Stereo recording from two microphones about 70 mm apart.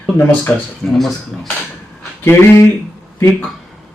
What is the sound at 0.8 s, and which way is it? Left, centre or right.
Speech, centre.